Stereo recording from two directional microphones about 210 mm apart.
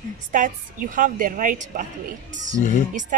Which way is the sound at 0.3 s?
40° right (ahead or behind).